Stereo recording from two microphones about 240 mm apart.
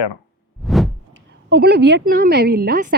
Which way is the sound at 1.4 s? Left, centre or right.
Right.